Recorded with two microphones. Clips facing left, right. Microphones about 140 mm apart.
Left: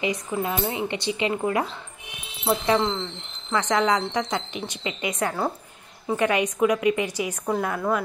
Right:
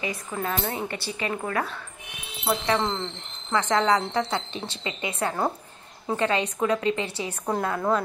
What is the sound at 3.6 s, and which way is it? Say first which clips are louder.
Speech: even; 15° left (ahead or behind).